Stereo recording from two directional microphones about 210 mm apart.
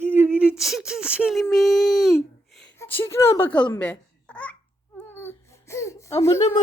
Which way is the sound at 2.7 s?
10° left (ahead or behind).